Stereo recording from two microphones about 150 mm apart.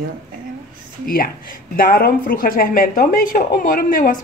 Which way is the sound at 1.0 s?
75° left (ahead or behind).